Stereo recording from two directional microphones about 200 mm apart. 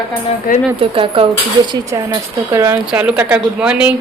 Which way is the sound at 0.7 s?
25° right (ahead or behind).